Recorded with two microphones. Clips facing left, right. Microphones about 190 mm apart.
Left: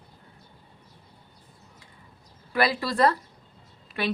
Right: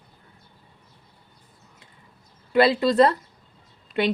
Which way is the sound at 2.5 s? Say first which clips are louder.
Right 7 dB; 25° right (ahead or behind).